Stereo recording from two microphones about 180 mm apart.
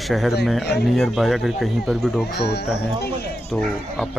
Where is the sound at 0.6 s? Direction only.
65° left (ahead or behind).